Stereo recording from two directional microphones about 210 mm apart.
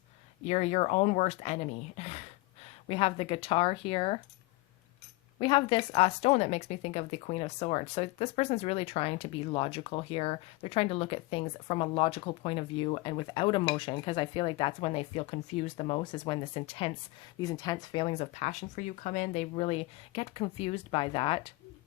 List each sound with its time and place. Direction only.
0.4 s a woman's voice: 30° left (ahead or behind)
5.4 s a woman's voice: 25° left (ahead or behind)